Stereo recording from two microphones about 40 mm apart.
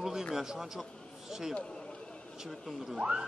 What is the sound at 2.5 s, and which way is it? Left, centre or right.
Speech, centre.